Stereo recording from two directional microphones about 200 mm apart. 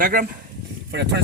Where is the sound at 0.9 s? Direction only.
60° right (ahead or behind).